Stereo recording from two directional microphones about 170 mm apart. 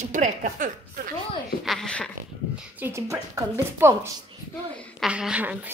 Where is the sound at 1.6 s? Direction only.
Centre (ahead or behind).